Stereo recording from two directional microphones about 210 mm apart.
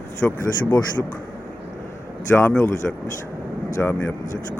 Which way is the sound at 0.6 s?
15° left (ahead or behind).